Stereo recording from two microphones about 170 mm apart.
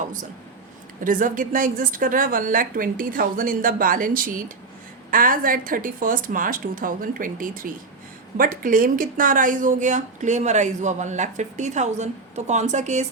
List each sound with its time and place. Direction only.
1.0 s speech: 50° right (ahead or behind)